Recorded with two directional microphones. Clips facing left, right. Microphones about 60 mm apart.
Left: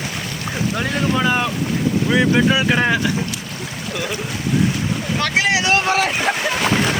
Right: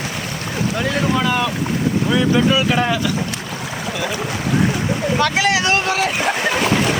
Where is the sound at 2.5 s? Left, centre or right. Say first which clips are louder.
Even; left.